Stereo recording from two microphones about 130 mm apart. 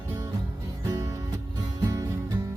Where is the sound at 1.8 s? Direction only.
30° right (ahead or behind).